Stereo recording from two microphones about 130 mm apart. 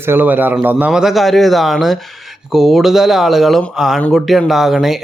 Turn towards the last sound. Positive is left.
turn(degrees=0)  # may be behind; listen again after turning